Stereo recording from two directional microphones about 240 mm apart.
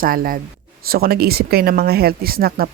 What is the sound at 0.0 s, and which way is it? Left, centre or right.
Speech, right.